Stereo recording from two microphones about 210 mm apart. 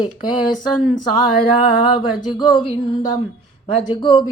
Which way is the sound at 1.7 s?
25° left (ahead or behind).